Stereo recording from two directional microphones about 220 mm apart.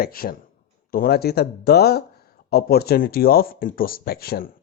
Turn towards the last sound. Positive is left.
turn(degrees=45)  # may be behind; listen again after turning